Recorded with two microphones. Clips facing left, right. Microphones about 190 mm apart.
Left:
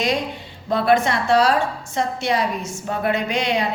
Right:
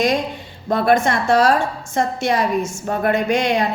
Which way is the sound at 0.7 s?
45° right (ahead or behind).